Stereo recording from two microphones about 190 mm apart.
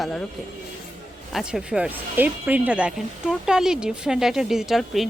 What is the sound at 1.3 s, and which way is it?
Speech, centre (ahead or behind).